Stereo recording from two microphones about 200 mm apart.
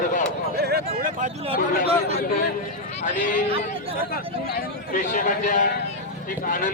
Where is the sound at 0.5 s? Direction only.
50° right (ahead or behind).